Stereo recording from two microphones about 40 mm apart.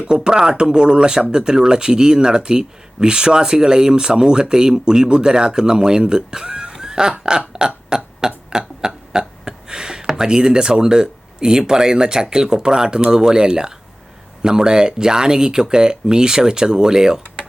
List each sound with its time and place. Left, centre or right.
0.1 s speech: centre
7.9 s burping: centre
8.4 s a sound: centre
9.1 s hiccup: centre
10.2 s speech: centre